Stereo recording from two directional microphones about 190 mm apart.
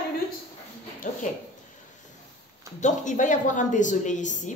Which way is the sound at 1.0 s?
45° left (ahead or behind).